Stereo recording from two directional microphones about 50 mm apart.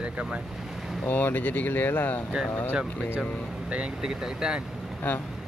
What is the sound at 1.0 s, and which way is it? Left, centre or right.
Speech, left.